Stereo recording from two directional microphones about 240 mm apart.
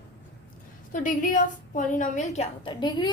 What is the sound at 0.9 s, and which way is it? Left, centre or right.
A woman's voice, left.